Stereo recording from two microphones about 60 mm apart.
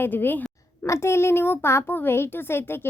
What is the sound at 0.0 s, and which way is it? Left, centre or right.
Speech, left.